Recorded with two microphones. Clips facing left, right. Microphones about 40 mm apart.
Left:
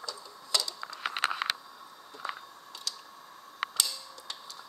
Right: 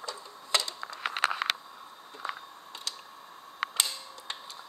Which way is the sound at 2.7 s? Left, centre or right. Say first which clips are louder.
Right 1 dB; right.